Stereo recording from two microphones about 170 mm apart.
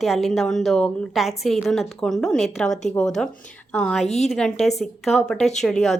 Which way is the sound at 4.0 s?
40° left (ahead or behind).